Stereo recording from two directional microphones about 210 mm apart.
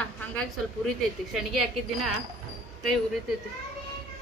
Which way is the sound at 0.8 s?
Centre (ahead or behind).